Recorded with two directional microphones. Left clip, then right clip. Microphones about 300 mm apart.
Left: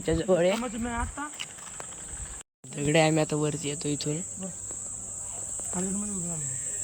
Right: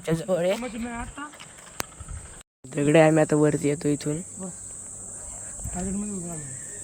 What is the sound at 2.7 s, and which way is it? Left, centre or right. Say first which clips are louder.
Speech: right 6 dB; centre.